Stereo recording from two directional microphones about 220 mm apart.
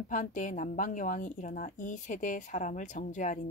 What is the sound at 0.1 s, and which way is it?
Speech, 35° left (ahead or behind).